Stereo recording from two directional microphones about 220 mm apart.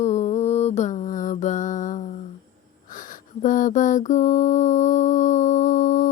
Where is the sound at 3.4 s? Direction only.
35° left (ahead or behind).